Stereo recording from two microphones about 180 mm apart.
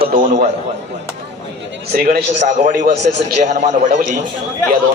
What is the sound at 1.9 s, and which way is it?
A man's voice, 60° right (ahead or behind).